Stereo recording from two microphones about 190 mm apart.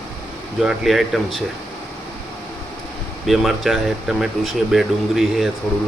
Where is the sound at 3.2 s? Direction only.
Centre (ahead or behind).